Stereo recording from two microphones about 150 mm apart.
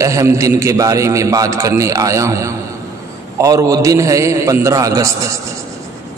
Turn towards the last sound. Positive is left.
turn(degrees=-20)  # may be behind; listen again after turning